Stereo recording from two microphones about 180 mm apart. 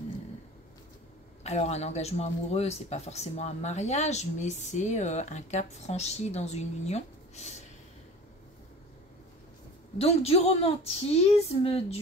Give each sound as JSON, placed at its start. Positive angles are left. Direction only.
{"t": 1.4, "sound": "speech", "side_deg": 35}
{"t": 9.9, "sound": "speech", "side_deg": 35}